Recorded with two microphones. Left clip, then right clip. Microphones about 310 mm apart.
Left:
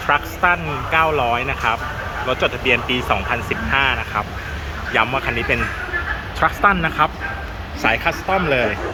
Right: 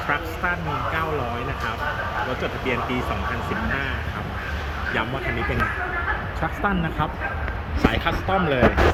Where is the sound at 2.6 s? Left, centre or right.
Centre.